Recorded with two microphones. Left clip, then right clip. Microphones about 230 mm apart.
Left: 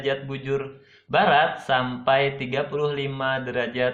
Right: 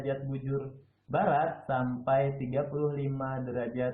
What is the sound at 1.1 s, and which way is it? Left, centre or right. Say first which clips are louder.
Mantra: left 9 dB; left.